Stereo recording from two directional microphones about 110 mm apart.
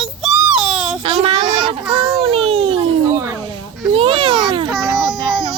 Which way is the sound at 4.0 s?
50° right (ahead or behind).